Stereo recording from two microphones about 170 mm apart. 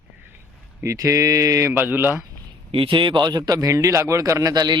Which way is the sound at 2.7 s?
30° right (ahead or behind).